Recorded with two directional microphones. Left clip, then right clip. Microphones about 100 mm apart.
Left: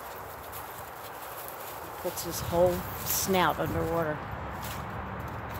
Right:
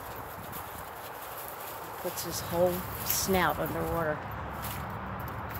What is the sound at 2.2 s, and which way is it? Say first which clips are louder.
Speech: left 3 dB; 15° left (ahead or behind).